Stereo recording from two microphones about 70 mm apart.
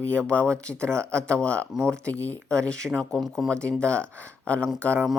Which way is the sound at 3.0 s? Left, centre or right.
Centre.